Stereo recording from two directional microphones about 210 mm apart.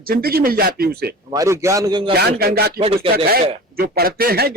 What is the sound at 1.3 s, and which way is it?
Speech, 15° right (ahead or behind).